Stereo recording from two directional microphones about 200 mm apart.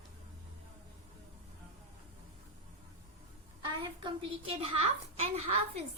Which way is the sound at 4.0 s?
25° right (ahead or behind).